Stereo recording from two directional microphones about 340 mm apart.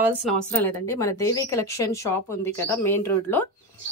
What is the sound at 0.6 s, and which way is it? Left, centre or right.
A woman's voice, centre.